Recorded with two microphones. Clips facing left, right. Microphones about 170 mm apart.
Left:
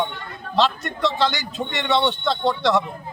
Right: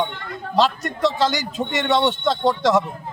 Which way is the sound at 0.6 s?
40° right (ahead or behind).